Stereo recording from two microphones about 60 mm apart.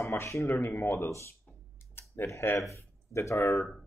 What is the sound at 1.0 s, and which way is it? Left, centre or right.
Speech, left.